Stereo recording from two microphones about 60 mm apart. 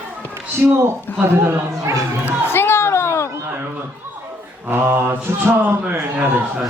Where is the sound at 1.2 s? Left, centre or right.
Right.